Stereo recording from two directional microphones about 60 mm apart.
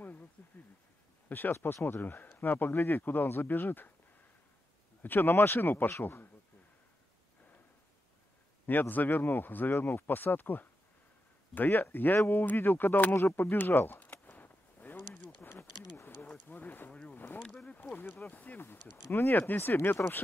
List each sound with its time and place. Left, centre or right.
0.4 s a sound: left
1.3 s speech: left
5.0 s speech: left
8.6 s speech: left
13.4 s a sound: left
18.1 s speech: left